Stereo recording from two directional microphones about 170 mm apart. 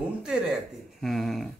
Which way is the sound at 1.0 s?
Centre (ahead or behind).